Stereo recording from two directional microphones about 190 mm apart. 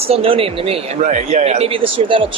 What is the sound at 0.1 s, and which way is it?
A man's voice, 30° right (ahead or behind).